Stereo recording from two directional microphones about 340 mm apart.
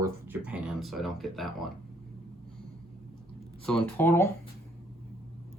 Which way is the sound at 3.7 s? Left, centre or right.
Centre.